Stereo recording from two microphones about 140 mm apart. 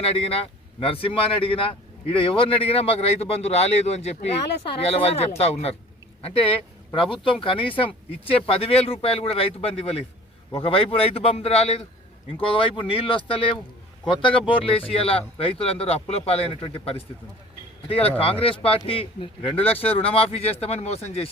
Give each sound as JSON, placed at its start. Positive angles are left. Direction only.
{"t": 0.0, "sound": "a man's voice", "side_deg": 45}